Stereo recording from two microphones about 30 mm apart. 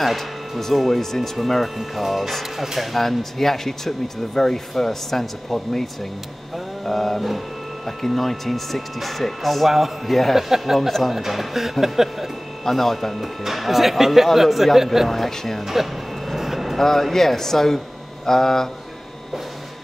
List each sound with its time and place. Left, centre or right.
0.6 s speech: centre
2.9 s speech: centre
6.9 s speech: centre
11.1 s speech: centre
12.6 s speech: centre
13.1 s speech: centre
15.6 s vehicle: centre
16.7 s speech: centre